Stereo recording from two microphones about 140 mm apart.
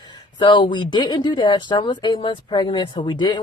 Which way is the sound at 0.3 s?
35° left (ahead or behind).